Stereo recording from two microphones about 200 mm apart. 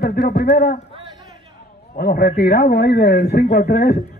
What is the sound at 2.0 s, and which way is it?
Speech, 50° left (ahead or behind).